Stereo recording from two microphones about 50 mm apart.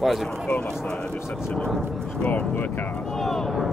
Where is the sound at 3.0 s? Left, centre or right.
Centre.